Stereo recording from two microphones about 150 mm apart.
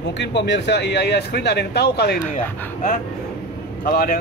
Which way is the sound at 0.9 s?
90° left.